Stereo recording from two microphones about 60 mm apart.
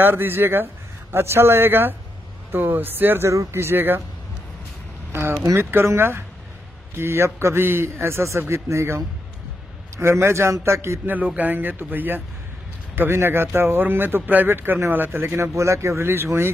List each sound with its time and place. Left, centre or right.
0.0 s speech: right
3.3 s a man's voice: right
5.6 s a man's voice: right
11.1 s speech: right
15.5 s a man's voice: right